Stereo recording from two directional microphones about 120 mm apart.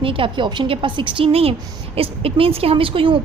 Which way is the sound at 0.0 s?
45° right (ahead or behind).